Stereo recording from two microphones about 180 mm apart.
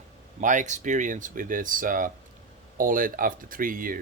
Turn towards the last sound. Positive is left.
turn(degrees=-50)  # may be behind; listen again after turning